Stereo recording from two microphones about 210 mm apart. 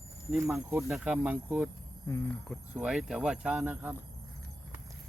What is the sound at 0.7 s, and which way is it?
Speech, 10° right (ahead or behind).